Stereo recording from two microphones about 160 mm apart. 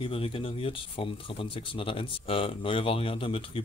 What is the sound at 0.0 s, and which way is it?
Speech, 35° left (ahead or behind).